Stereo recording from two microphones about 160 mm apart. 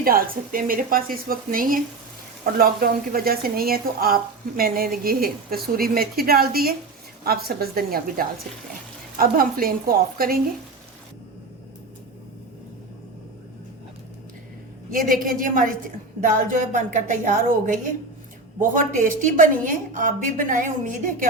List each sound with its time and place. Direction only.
0.0 s a woman's voice: 65° right (ahead or behind)
15.2 s a woman's voice: 60° right (ahead or behind)